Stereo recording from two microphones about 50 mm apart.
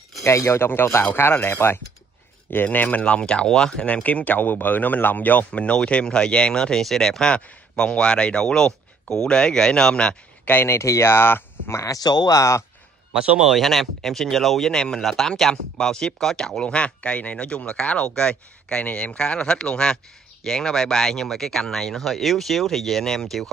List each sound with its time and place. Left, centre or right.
0.2 s speech: left
0.7 s speech: left
2.5 s speech: left
3.0 s speech: left
3.8 s speech: left
10.6 s speech: left
12.4 s speech: left
13.4 s speech: centre